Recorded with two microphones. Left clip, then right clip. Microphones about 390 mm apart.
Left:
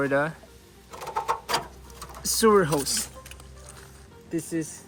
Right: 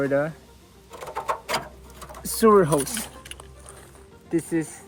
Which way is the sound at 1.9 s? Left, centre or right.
Centre.